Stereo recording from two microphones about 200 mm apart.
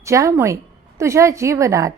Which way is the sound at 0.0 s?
15° right (ahead or behind).